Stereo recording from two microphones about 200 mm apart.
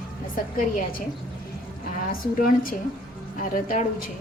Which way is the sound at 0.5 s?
45° left (ahead or behind).